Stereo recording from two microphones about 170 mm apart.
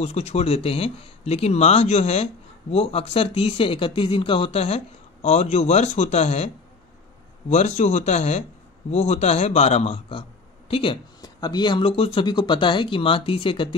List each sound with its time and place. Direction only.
0.0 s speech: 40° left (ahead or behind)